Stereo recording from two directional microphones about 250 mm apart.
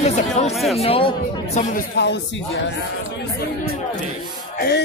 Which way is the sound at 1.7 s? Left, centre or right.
Left.